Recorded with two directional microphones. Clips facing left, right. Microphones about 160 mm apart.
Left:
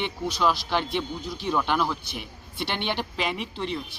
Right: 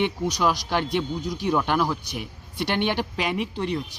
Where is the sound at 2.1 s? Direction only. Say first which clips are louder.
Right 3 dB; 40° right (ahead or behind).